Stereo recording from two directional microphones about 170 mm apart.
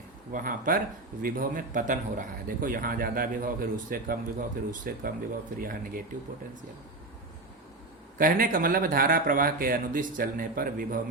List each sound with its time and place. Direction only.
0.3 s a man's voice: 55° right (ahead or behind)
8.2 s a man's voice: 55° right (ahead or behind)